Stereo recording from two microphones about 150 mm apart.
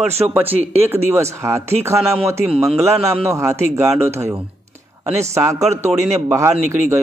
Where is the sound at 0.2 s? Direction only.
15° right (ahead or behind).